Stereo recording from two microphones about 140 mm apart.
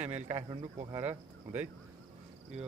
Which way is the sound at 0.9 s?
15° right (ahead or behind).